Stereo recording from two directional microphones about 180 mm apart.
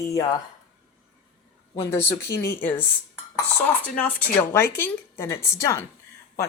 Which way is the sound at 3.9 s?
10° left (ahead or behind).